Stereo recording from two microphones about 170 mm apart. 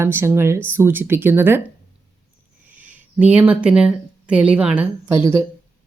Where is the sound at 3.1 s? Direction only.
10° right (ahead or behind).